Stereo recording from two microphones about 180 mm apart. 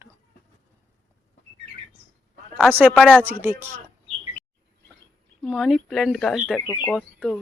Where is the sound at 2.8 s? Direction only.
10° right (ahead or behind).